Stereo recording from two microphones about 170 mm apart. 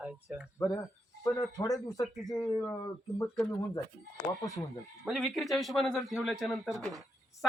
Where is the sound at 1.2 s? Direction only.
20° left (ahead or behind).